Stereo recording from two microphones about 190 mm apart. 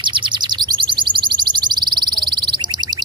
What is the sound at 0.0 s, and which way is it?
Bird, 25° right (ahead or behind).